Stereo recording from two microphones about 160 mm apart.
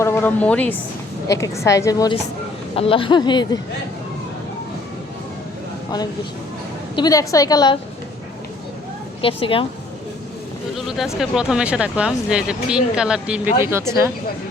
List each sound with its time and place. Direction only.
0.0 s a woman's voice: 15° left (ahead or behind)
2.7 s speech: 35° left (ahead or behind)
6.9 s speech: 25° left (ahead or behind)
9.2 s a woman's voice: 35° left (ahead or behind)
10.8 s speech: centre (ahead or behind)